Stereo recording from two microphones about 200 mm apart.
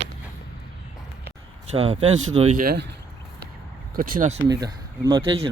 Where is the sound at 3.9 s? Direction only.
45° right (ahead or behind).